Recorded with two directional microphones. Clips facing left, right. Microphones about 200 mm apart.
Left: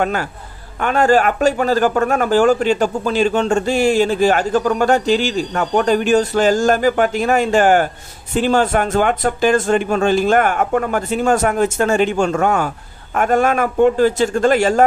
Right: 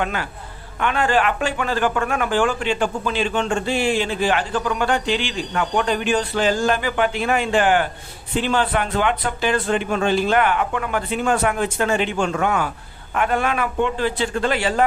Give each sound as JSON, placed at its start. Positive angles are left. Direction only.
{"t": 0.0, "sound": "a man's voice", "side_deg": 45}